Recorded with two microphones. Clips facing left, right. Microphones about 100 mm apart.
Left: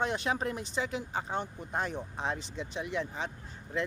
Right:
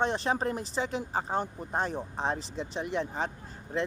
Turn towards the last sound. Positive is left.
turn(degrees=-40)  # may be behind; listen again after turning